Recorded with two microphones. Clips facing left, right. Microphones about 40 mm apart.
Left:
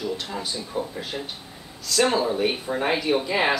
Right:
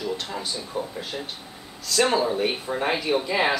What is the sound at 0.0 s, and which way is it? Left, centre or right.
Speech, centre.